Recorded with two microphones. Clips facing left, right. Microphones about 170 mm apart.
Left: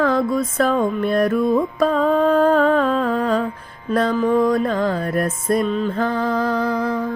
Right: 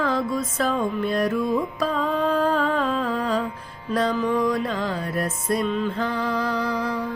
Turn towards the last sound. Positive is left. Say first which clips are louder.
# left 5 dB
turn(degrees=50)  # may be behind; listen again after turning